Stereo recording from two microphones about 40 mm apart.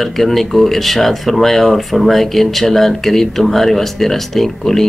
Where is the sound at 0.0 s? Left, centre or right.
Centre.